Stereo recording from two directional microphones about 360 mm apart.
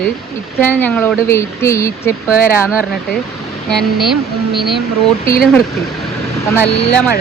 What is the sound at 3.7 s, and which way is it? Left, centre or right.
Speech, centre.